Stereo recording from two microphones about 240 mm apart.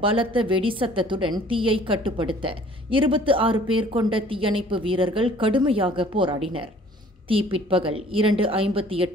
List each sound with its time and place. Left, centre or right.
0.0 s a woman's voice: right